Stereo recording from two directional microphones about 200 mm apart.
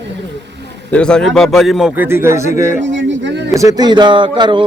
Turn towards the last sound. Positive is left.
turn(degrees=-25)  # may be behind; listen again after turning